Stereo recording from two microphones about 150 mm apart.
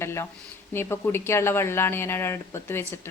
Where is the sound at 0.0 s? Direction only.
15° left (ahead or behind).